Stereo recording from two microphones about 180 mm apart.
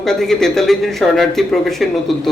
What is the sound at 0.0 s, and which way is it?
Speech, centre (ahead or behind).